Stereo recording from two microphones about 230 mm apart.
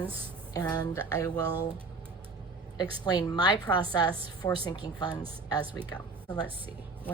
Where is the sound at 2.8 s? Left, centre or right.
Centre.